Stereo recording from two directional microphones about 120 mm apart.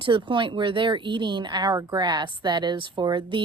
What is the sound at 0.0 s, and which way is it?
Speech, 45° right (ahead or behind).